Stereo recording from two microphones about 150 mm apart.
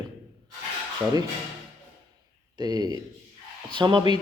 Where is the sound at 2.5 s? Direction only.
25° right (ahead or behind).